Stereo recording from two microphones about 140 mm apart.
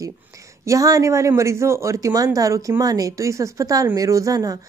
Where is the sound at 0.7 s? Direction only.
25° right (ahead or behind).